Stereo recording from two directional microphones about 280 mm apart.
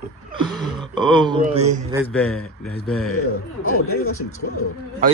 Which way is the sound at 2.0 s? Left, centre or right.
Centre.